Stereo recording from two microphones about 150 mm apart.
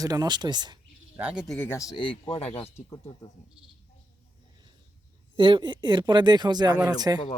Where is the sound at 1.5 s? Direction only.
15° left (ahead or behind).